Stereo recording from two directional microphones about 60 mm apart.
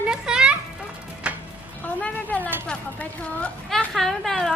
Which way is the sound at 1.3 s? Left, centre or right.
Centre.